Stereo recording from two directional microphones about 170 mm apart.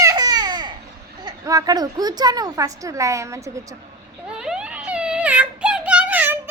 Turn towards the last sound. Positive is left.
turn(degrees=-10)  # may be behind; listen again after turning